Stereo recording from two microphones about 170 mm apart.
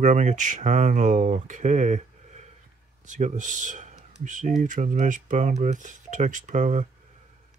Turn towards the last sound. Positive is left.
turn(degrees=-45)  # may be behind; listen again after turning